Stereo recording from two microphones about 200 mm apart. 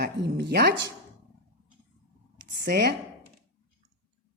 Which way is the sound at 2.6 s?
55° right (ahead or behind).